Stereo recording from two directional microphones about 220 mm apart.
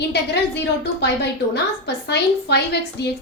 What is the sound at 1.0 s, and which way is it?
A woman's voice, 50° left (ahead or behind).